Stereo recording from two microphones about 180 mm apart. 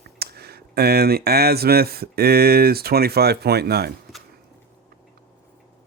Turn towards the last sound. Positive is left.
turn(degrees=-60)  # may be behind; listen again after turning